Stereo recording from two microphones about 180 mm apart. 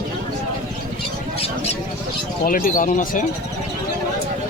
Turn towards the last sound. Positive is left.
turn(degrees=45)  # may be behind; listen again after turning